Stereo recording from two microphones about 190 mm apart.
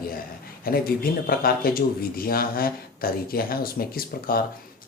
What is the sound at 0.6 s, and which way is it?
Speech, 50° left (ahead or behind).